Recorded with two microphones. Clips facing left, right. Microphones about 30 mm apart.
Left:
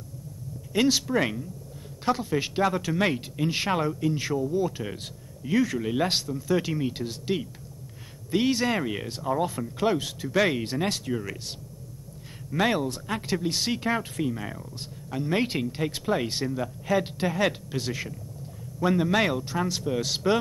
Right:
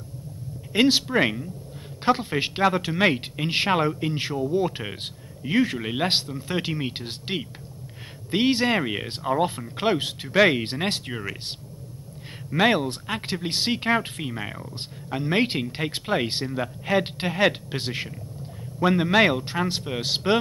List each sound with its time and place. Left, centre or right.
0.7 s speech: right